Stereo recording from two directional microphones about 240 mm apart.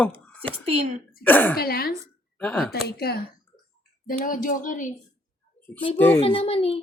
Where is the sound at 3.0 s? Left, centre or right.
Left.